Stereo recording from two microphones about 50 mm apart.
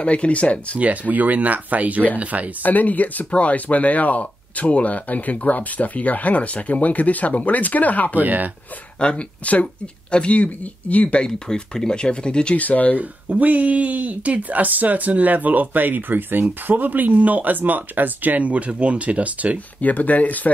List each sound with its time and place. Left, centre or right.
0.0 s speech: left
0.7 s speech: right
2.6 s speech: left
8.2 s speech: right
9.0 s speech: left
11.2 s speech: centre
12.5 s speech: left
13.3 s speech: right
19.8 s speech: left